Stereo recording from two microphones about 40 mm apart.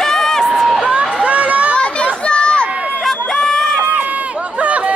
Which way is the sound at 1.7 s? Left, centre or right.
Left.